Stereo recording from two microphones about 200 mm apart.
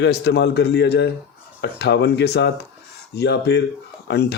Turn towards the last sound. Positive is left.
turn(degrees=55)  # may be behind; listen again after turning